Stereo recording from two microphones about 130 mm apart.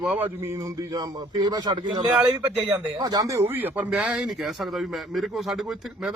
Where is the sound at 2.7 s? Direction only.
30° right (ahead or behind); by 5.6 s centre (ahead or behind).